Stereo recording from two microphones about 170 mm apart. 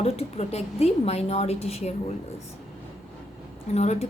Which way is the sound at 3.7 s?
40° left (ahead or behind).